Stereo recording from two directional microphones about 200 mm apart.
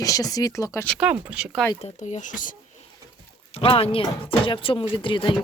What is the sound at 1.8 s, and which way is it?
Speech, 35° left (ahead or behind).